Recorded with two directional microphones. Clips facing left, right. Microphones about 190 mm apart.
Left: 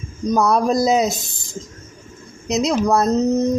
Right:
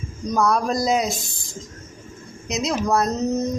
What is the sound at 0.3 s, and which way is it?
Speech, 25° left (ahead or behind).